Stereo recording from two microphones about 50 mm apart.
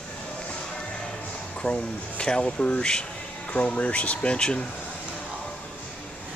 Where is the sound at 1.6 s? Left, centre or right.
Centre.